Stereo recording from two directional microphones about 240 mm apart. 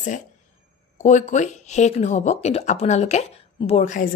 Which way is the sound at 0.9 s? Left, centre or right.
Left.